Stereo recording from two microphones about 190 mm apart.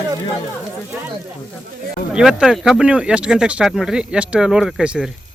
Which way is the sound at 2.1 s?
5° right (ahead or behind).